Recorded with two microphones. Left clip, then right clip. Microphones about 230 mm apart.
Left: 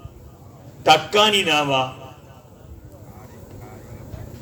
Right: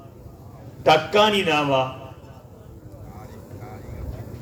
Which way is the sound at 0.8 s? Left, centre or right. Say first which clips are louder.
Left 1 dB; left.